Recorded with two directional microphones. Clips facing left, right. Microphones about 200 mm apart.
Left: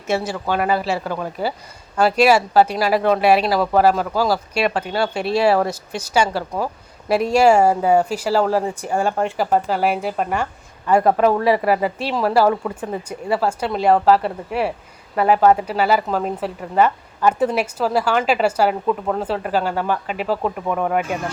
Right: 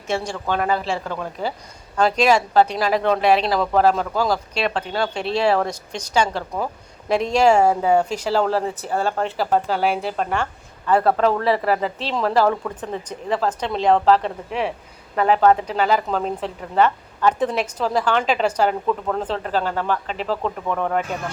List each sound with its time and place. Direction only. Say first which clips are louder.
0.1 s speech: left 2 dB; 5° left (ahead or behind)